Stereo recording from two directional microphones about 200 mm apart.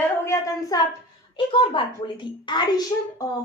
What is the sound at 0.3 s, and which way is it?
A woman's voice, 15° left (ahead or behind).